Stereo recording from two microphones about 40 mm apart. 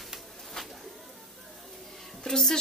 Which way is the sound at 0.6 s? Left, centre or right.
Centre.